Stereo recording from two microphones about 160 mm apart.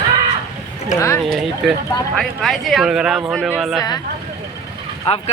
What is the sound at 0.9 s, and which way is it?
Speech, 20° left (ahead or behind).